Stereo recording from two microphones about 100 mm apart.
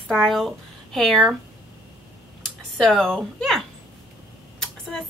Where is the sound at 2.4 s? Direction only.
5° left (ahead or behind).